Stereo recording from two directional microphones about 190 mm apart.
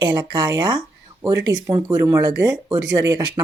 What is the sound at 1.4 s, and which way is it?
Speech, 70° right (ahead or behind).